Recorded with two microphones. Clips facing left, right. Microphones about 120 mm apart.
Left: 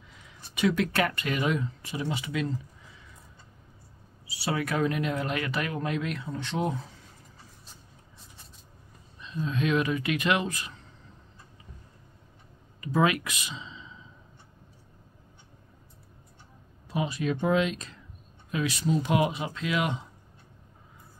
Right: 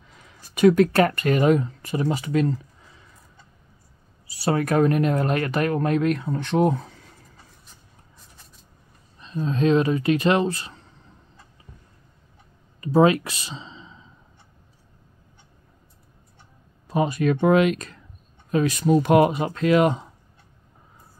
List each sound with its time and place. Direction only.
0.6 s speech: 45° right (ahead or behind)
4.3 s speech: 45° right (ahead or behind)
9.2 s speech: 35° right (ahead or behind)
12.8 s speech: 30° right (ahead or behind)
16.8 s speech: 45° right (ahead or behind)
18.5 s speech: 45° right (ahead or behind)